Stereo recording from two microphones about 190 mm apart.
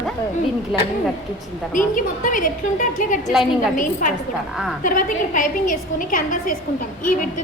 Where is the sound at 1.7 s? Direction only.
45° left (ahead or behind).